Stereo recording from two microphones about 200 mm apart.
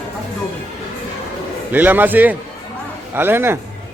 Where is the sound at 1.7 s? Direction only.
10° right (ahead or behind).